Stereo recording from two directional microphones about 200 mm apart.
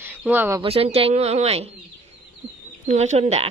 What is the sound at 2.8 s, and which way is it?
Speech, 35° right (ahead or behind).